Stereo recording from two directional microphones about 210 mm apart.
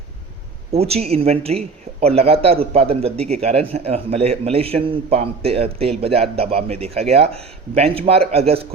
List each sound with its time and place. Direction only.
0.7 s a man's voice: 30° right (ahead or behind)